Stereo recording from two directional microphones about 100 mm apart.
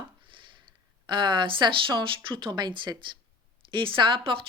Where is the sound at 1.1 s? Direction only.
55° right (ahead or behind).